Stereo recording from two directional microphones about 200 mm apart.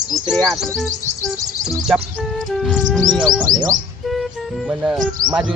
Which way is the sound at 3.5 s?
20° right (ahead or behind).